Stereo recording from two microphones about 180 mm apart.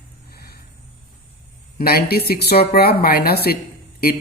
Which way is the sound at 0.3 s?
60° left (ahead or behind).